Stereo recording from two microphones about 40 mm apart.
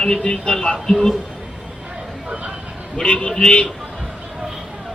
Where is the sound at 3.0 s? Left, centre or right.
Left.